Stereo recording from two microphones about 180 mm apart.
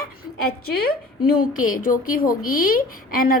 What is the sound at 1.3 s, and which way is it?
A woman's voice, 50° left (ahead or behind).